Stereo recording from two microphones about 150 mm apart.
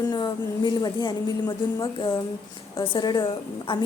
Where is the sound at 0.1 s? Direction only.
30° left (ahead or behind).